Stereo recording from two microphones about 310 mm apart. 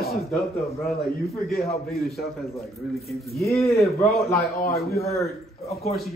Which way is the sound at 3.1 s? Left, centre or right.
Centre.